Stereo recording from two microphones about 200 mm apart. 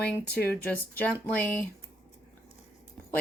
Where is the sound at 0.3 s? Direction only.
50° left (ahead or behind).